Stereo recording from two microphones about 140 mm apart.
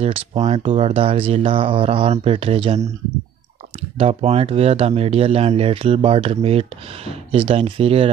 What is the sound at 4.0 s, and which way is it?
Speech, 45° right (ahead or behind).